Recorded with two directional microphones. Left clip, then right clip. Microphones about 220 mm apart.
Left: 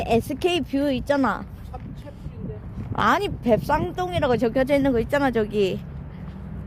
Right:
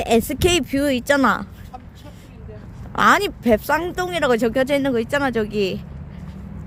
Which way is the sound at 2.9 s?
15° right (ahead or behind).